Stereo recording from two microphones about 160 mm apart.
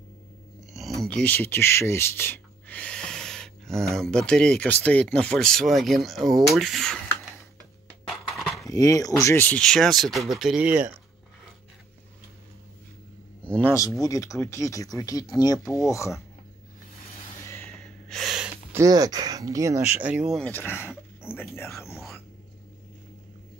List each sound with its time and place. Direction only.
0.7 s speech: centre (ahead or behind)
8.4 s a sound: centre (ahead or behind)
8.6 s speech: 20° left (ahead or behind); by 11.0 s 10° right (ahead or behind)
13.4 s speech: 10° left (ahead or behind)
14.0 s speech: 20° left (ahead or behind)
17.6 s snort: 5° left (ahead or behind)
18.7 s speech: 20° right (ahead or behind)
20.0 s speech: 5° right (ahead or behind)
20.4 s speech: 15° left (ahead or behind)